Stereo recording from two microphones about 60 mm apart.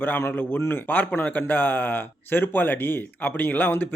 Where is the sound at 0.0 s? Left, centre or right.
Left.